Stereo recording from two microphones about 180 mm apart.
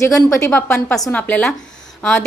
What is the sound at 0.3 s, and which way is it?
Speech, 15° left (ahead or behind).